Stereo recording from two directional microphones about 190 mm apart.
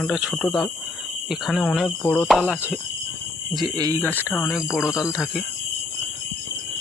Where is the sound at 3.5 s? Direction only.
20° right (ahead or behind).